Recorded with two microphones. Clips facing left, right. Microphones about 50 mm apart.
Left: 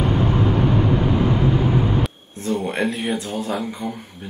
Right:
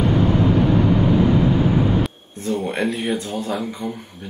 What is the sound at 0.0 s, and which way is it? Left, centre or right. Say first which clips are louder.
Vehicle: right 2 dB; left.